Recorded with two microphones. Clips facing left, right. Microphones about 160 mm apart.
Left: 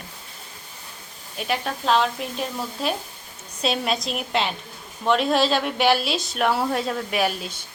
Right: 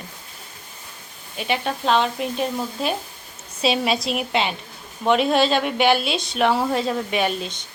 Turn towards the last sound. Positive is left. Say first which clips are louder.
# right 1 dB
turn(degrees=5)  # may be behind; listen again after turning